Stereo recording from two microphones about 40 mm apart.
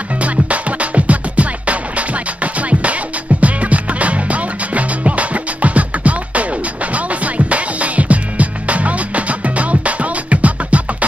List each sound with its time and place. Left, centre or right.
0.2 s music: right